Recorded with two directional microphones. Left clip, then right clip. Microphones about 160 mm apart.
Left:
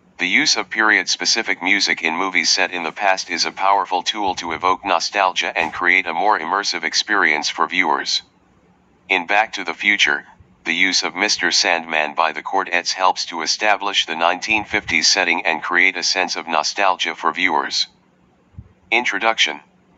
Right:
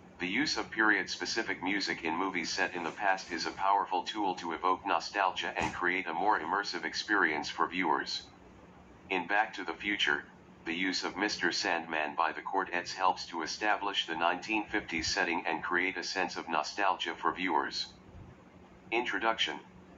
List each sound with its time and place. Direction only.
0.2 s speech: 40° left (ahead or behind)
18.9 s speech: 40° left (ahead or behind)